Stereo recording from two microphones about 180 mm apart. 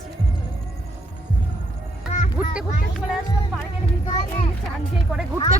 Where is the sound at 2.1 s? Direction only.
45° left (ahead or behind).